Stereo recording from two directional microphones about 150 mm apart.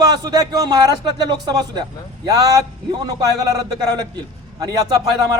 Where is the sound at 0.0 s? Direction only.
25° right (ahead or behind).